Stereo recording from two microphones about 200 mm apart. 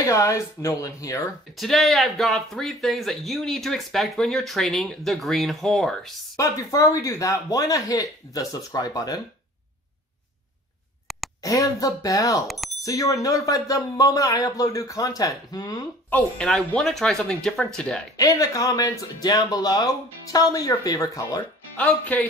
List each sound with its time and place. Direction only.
0.0 s speech: 15° left (ahead or behind)
1.6 s speech: centre (ahead or behind)
6.3 s speech: 15° left (ahead or behind)
11.1 s a sound: centre (ahead or behind)
11.4 s speech: 15° left (ahead or behind)
12.4 s speech: centre (ahead or behind)
12.8 s speech: 15° left (ahead or behind)
16.1 s speech: 5° left (ahead or behind)
18.1 s speech: 15° left (ahead or behind)